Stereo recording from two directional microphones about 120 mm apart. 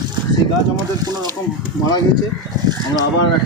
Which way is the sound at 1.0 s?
35° right (ahead or behind).